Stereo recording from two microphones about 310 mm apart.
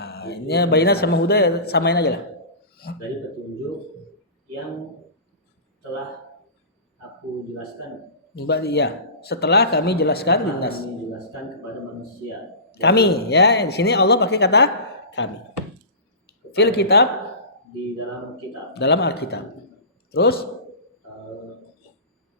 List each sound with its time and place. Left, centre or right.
0.0 s a man's voice: left
8.4 s a man's voice: left
12.8 s a man's voice: left
16.6 s a man's voice: left
18.7 s a man's voice: left